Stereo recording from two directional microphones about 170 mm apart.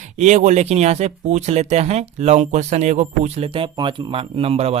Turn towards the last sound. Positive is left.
turn(degrees=-35)  # may be behind; listen again after turning